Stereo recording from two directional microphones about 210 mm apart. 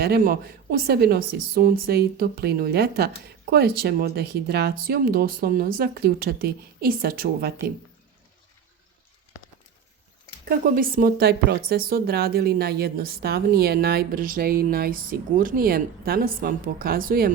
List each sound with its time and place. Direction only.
0.0 s a woman's voice: 45° right (ahead or behind)
10.8 s a woman's voice: 40° right (ahead or behind)